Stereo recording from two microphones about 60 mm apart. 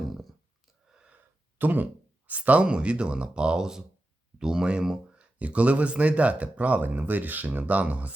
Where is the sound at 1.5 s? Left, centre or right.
Right.